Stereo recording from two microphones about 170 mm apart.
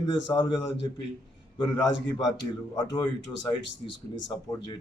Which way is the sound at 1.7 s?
25° left (ahead or behind).